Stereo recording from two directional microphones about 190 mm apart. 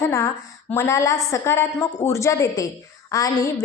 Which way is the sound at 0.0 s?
15° left (ahead or behind).